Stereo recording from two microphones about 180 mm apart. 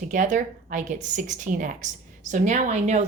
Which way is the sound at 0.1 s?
45° right (ahead or behind).